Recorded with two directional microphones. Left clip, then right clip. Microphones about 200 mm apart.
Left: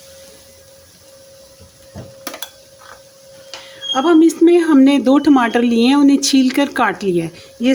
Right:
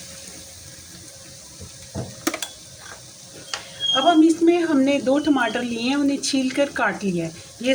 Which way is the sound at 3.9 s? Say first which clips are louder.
Left 4 dB; 60° left (ahead or behind).